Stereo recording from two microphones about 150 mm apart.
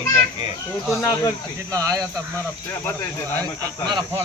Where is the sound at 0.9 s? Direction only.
20° left (ahead or behind).